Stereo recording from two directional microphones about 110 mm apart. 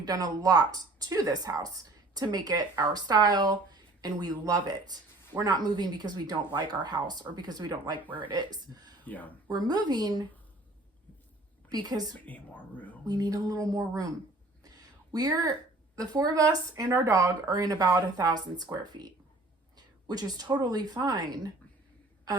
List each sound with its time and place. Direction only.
0.0 s speech: 40° right (ahead or behind)
8.1 s speech: 50° right (ahead or behind)
9.0 s speech: 15° left (ahead or behind)
9.5 s speech: 40° right (ahead or behind)
11.7 s speech: 35° right (ahead or behind)
12.2 s speech: 15° left (ahead or behind)
13.1 s speech: 35° right (ahead or behind)
14.6 s a sound: 35° right (ahead or behind)
16.0 s a woman's voice: 35° right (ahead or behind)